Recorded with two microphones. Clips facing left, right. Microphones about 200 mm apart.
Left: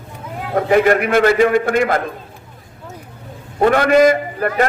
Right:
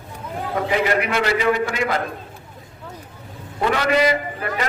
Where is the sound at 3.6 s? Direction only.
50° left (ahead or behind).